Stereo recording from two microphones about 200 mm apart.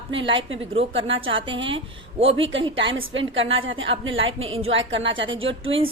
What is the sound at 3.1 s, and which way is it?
A woman's voice, 70° right (ahead or behind).